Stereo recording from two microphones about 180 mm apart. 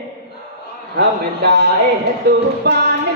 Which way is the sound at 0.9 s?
70° right (ahead or behind).